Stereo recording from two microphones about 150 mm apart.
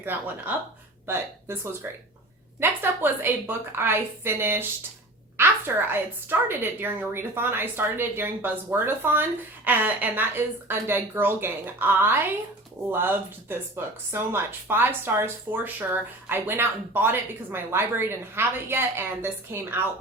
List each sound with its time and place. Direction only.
0.0 s speech: 15° right (ahead or behind)